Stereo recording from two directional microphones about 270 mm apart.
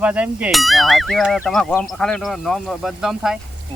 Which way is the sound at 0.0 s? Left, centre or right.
Centre.